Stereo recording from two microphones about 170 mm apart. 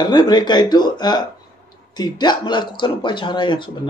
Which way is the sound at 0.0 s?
25° left (ahead or behind).